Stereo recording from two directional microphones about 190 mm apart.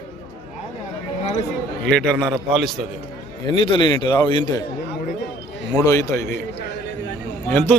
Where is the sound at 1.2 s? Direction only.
35° left (ahead or behind).